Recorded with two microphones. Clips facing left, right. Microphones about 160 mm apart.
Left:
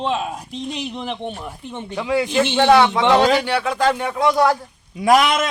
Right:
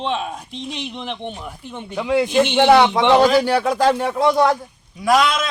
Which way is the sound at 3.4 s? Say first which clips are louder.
Right 3 dB; 40° right (ahead or behind).